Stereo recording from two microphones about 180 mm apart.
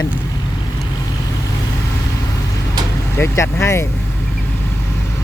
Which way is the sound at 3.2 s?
15° left (ahead or behind).